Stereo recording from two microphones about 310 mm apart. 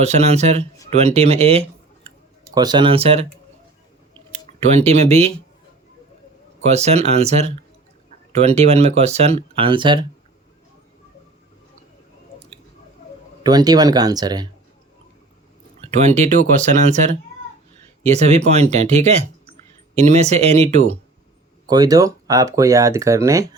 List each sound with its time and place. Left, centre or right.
0.0 s speech: right
4.3 s speech: right
6.7 s speech: right
13.4 s speech: centre
16.0 s speech: right